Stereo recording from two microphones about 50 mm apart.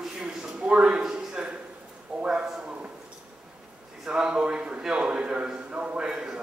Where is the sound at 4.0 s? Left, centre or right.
Centre.